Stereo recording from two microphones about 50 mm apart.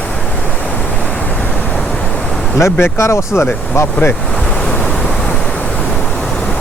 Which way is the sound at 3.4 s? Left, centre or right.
Left.